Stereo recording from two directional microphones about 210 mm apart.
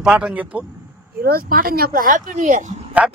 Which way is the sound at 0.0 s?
5° right (ahead or behind).